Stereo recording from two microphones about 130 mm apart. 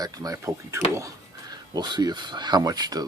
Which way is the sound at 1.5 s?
35° right (ahead or behind).